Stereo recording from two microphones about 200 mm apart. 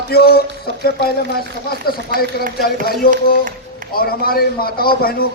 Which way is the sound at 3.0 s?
50° left (ahead or behind).